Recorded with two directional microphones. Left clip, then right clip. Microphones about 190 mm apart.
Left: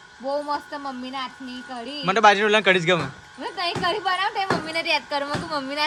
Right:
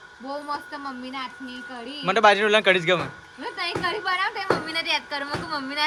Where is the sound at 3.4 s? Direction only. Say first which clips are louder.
Left 2 dB; 50° left (ahead or behind).